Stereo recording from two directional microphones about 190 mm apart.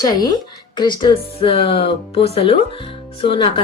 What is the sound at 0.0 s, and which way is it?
A woman's voice, 20° left (ahead or behind).